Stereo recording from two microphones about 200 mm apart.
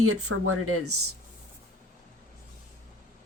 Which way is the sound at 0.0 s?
90° right.